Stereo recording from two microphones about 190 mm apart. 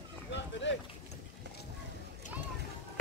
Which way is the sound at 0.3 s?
70° left (ahead or behind).